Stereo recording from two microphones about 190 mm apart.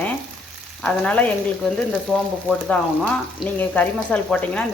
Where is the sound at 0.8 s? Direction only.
5° left (ahead or behind).